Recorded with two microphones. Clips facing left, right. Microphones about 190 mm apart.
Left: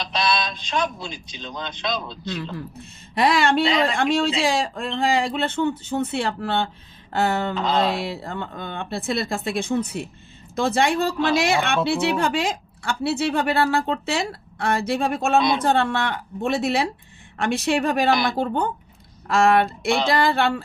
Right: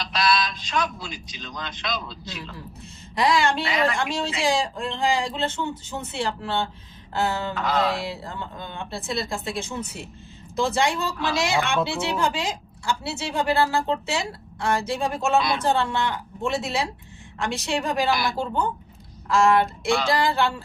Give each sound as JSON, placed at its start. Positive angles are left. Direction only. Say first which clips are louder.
{"t": 0.0, "sound": "a man's voice", "louder": "even", "side_deg": 20}
{"t": 3.2, "sound": "a woman's voice", "louder": "left 2 dB", "side_deg": 60}
{"t": 3.6, "sound": "a man's voice", "louder": "left 5 dB", "side_deg": 20}
{"t": 4.4, "sound": "a woman's voice", "louder": "left 1 dB", "side_deg": 60}
{"t": 7.5, "sound": "a man's voice", "louder": "left 2 dB", "side_deg": 20}
{"t": 8.0, "sound": "a woman's voice", "louder": "left 3 dB", "side_deg": 60}